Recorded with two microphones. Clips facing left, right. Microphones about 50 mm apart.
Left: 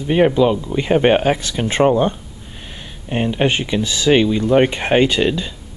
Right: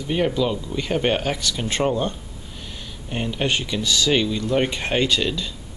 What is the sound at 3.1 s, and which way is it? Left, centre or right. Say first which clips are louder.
Speech: left 6 dB; left.